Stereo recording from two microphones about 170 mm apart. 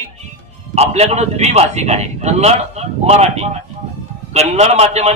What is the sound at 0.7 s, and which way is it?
Speech, 40° right (ahead or behind).